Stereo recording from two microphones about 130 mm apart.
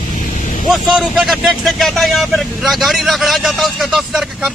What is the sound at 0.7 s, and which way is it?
Speech, centre (ahead or behind).